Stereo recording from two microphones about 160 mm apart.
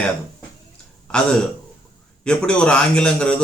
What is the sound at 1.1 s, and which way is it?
A man's voice, 5° left (ahead or behind).